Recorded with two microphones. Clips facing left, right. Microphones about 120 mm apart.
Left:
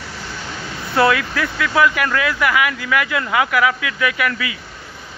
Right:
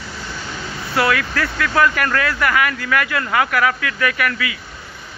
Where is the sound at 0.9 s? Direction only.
25° left (ahead or behind).